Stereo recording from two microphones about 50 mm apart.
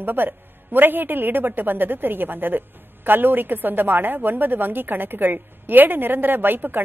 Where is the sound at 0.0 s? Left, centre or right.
Right.